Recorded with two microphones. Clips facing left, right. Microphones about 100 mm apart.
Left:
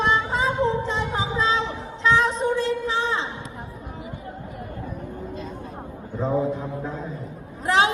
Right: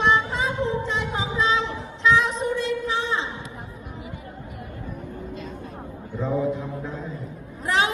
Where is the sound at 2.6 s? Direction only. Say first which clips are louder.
Left 2 dB; 35° left (ahead or behind).